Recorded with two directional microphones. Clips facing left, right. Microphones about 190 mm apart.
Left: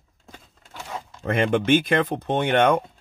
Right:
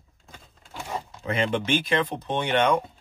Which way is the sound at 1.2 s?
50° left (ahead or behind).